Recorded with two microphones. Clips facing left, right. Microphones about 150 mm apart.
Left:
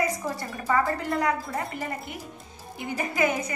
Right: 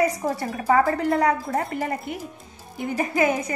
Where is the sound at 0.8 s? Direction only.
45° right (ahead or behind).